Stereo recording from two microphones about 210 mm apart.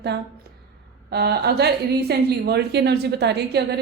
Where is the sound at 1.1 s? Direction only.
50° right (ahead or behind).